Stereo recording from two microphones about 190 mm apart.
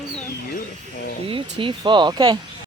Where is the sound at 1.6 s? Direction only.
25° right (ahead or behind).